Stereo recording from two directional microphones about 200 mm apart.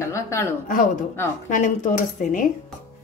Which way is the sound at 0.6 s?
40° left (ahead or behind).